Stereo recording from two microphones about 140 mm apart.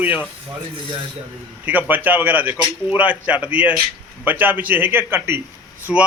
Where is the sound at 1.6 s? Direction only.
10° right (ahead or behind).